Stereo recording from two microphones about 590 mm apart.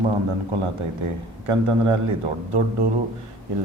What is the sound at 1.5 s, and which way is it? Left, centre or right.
Speech, right.